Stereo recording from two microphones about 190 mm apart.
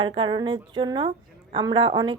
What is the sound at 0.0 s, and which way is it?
Speech, 25° right (ahead or behind).